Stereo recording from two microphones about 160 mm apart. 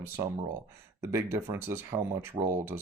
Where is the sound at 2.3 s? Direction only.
50° right (ahead or behind).